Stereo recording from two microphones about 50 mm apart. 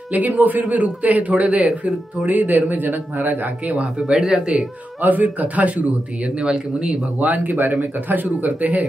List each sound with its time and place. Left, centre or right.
0.1 s speech: right
3.8 s speech: centre
5.0 s a man's voice: right; by 7.0 s centre
7.2 s speech: right